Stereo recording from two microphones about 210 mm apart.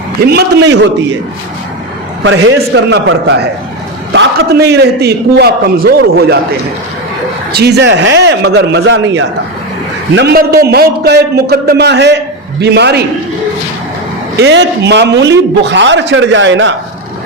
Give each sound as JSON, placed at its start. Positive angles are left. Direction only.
{"t": 0.3, "sound": "a man's voice", "side_deg": -50}
{"t": 2.2, "sound": "a man's voice", "side_deg": -65}
{"t": 7.5, "sound": "a man's voice", "side_deg": -50}
{"t": 14.3, "sound": "a man's voice", "side_deg": -55}